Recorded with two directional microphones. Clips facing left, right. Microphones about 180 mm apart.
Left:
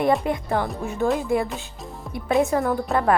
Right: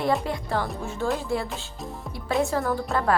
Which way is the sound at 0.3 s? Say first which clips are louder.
Left 4 dB; 20° left (ahead or behind).